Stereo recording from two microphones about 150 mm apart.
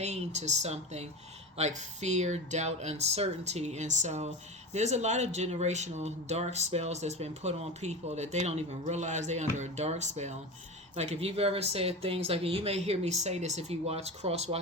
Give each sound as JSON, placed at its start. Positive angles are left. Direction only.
{"t": 0.0, "sound": "speech", "side_deg": -50}